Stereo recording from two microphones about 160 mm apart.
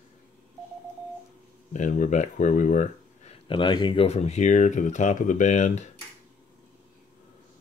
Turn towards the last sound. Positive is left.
turn(degrees=50)  # may be behind; listen again after turning